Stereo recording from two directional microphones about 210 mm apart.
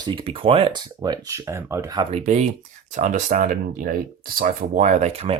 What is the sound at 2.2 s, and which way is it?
Speech, 30° right (ahead or behind).